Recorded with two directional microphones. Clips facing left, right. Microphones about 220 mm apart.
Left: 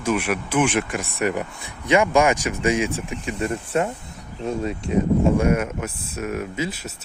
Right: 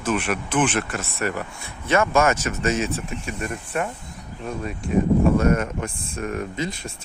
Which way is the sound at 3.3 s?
30° left (ahead or behind).